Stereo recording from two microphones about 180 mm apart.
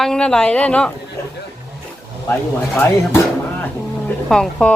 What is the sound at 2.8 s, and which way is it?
A woman's voice, 10° left (ahead or behind).